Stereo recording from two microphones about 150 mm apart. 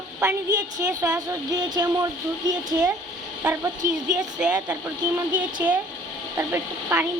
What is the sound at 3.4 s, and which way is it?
Speech, 15° right (ahead or behind).